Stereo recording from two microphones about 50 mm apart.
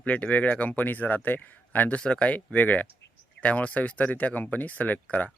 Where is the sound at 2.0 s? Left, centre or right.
Centre.